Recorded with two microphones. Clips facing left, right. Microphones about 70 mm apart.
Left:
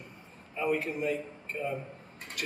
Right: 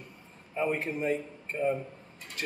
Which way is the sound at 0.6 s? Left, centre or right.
Right.